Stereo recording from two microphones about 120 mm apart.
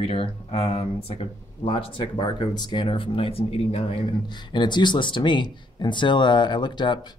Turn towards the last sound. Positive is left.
turn(degrees=40)  # may be behind; listen again after turning